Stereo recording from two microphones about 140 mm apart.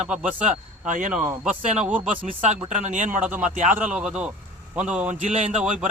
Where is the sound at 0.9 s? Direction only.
65° right (ahead or behind).